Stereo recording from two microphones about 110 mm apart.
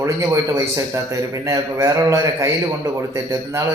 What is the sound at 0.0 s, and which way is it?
A man's voice, 25° right (ahead or behind).